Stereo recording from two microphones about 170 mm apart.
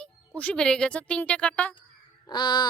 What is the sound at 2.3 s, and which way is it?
Crow, 25° left (ahead or behind).